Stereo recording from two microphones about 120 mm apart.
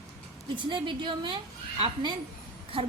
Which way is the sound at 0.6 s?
45° right (ahead or behind).